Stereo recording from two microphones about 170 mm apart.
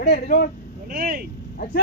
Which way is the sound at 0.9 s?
60° right (ahead or behind).